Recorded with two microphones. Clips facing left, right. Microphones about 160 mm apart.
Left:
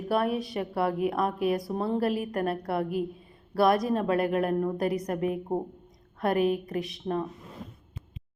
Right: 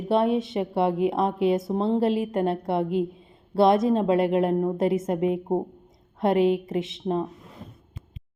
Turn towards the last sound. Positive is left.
turn(degrees=-25)  # may be behind; listen again after turning